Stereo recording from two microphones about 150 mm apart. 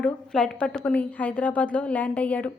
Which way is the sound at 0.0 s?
5° left (ahead or behind).